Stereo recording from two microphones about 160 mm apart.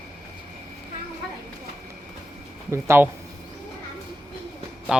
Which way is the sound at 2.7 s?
15° right (ahead or behind).